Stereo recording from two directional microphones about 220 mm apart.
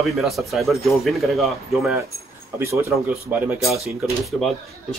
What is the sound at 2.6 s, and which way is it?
Speech, 10° right (ahead or behind).